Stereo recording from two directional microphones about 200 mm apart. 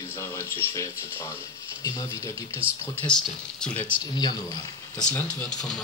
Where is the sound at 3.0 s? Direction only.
5° left (ahead or behind).